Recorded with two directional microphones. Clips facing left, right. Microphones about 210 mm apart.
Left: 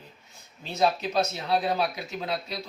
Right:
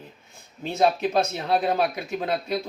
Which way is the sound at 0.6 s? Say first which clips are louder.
Right 4 dB; 55° right (ahead or behind).